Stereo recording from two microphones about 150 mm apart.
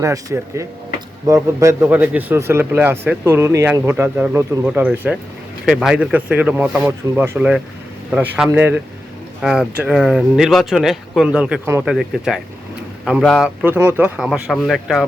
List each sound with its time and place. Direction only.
0.0 s speech: 20° right (ahead or behind); by 13.7 s 5° right (ahead or behind)
13.7 s speech: 15° right (ahead or behind)
14.2 s speech: 5° right (ahead or behind)